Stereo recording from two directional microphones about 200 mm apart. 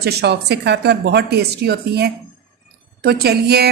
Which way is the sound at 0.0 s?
55° right (ahead or behind).